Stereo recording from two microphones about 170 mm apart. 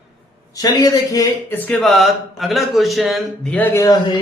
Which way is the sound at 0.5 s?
20° left (ahead or behind).